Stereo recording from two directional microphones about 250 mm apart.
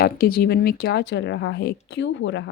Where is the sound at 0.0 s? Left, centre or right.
Left.